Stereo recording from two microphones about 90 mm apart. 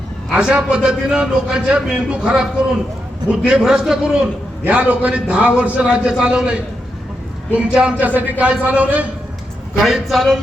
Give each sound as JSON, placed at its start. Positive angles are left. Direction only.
{"t": 0.3, "sound": "a man's voice", "side_deg": -10}
{"t": 9.8, "sound": "a man's voice", "side_deg": 0}